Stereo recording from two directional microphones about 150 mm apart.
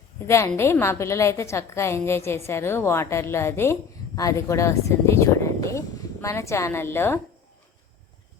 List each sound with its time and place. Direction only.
0.3 s a woman's voice: 20° left (ahead or behind)